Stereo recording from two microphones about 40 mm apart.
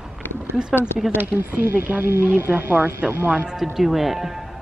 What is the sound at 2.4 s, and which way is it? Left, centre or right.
Speech, right.